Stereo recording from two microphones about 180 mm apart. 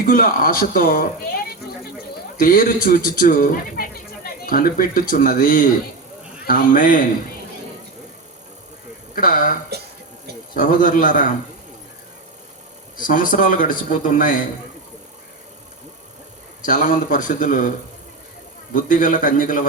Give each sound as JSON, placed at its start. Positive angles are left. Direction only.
{"t": 0.0, "sound": "speech", "side_deg": 50}
{"t": 2.4, "sound": "speech", "side_deg": 50}
{"t": 9.1, "sound": "speech", "side_deg": 50}
{"t": 13.0, "sound": "speech", "side_deg": 45}
{"t": 16.6, "sound": "speech", "side_deg": 45}
{"t": 18.7, "sound": "speech", "side_deg": 50}